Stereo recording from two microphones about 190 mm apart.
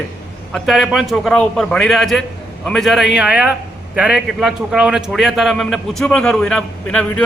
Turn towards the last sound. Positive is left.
turn(degrees=5)  # may be behind; listen again after turning